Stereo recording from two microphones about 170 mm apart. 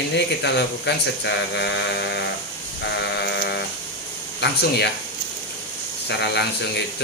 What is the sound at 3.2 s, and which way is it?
Sheep, 80° left.